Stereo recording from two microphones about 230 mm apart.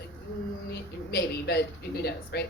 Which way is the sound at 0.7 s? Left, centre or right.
Left.